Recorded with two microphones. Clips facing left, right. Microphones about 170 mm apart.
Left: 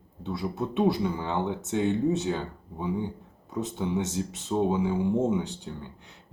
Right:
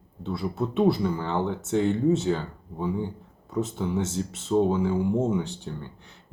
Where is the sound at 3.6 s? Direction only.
15° left (ahead or behind).